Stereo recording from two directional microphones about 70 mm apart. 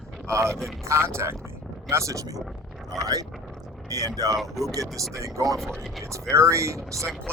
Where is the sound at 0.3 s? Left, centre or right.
Right.